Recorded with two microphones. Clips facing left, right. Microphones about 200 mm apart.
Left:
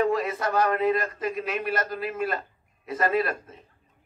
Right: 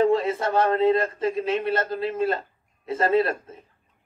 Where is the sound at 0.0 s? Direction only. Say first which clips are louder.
Right 4 dB; 25° right (ahead or behind).